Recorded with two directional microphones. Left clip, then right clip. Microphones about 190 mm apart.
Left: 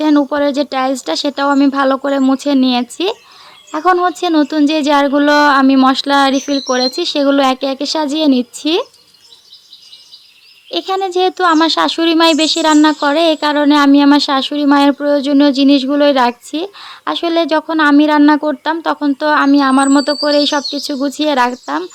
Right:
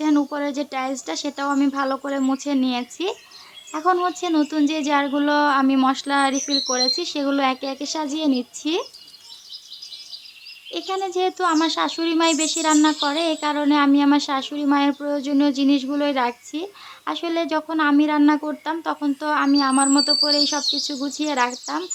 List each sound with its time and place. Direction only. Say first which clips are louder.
0.0 s speech: left 9 dB; 35° left (ahead or behind)
10.7 s speech: left 9 dB; 40° left (ahead or behind)